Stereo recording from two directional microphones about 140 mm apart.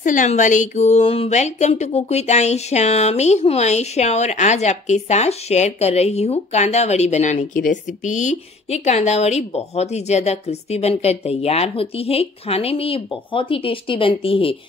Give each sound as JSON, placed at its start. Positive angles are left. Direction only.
{"t": 0.0, "sound": "a woman's voice", "side_deg": 65}